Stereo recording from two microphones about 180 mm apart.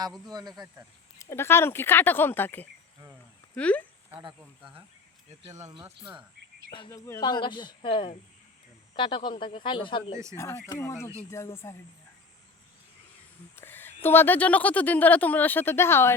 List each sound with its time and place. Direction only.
0.3 s speech: 20° right (ahead or behind)
1.2 s speech: 15° left (ahead or behind)
4.2 s speech: 25° right (ahead or behind)
6.7 s speech: 25° left (ahead or behind)
10.3 s speech: 15° left (ahead or behind)
13.6 s speech: 10° left (ahead or behind)